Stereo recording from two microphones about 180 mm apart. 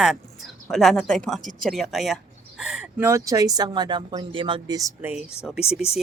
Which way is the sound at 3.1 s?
20° right (ahead or behind).